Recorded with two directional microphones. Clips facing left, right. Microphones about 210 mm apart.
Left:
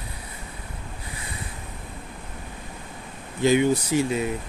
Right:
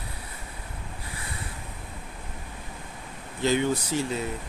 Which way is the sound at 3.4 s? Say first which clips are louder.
Left 5 dB; 15° left (ahead or behind).